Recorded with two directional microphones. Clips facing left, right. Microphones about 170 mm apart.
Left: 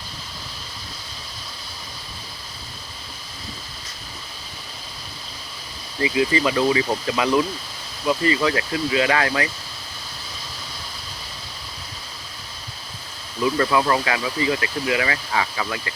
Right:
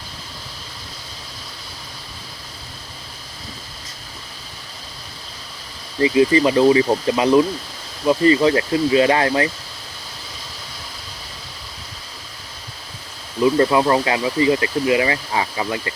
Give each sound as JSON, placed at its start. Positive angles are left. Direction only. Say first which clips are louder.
{"t": 6.0, "sound": "speech", "louder": "right 6 dB", "side_deg": -30}
{"t": 13.4, "sound": "speech", "louder": "right 5 dB", "side_deg": -25}